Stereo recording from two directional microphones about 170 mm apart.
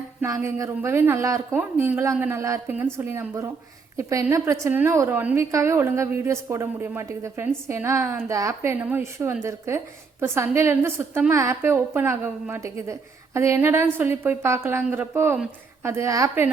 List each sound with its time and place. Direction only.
0.2 s a woman's voice: 15° right (ahead or behind)